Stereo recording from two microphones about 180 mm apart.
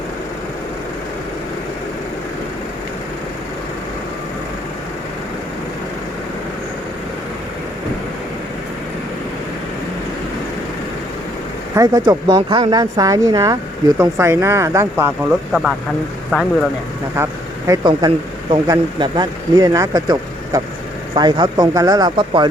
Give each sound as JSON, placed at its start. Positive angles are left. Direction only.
{"t": 11.7, "sound": "speech", "side_deg": -20}
{"t": 17.2, "sound": "speech", "side_deg": -15}